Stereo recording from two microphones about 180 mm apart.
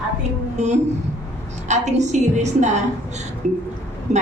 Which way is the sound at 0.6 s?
40° right (ahead or behind).